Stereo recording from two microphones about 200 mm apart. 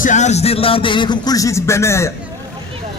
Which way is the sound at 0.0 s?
35° left (ahead or behind).